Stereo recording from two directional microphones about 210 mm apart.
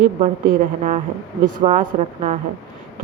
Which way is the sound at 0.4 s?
40° right (ahead or behind).